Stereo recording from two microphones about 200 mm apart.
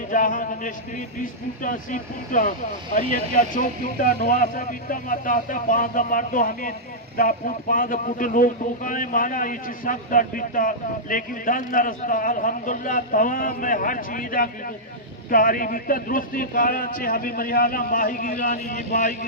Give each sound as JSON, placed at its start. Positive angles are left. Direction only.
{"t": 0.1, "sound": "speech", "side_deg": 40}